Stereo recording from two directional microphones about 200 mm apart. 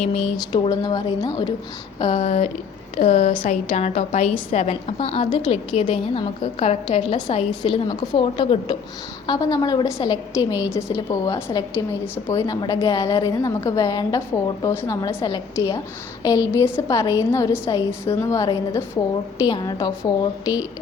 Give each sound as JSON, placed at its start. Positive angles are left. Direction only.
{"t": 0.0, "sound": "a woman's voice", "side_deg": 30}
{"t": 2.1, "sound": "a woman's voice", "side_deg": 35}